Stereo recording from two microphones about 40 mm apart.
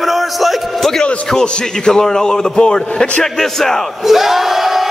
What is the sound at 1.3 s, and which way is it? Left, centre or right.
A man's voice, centre.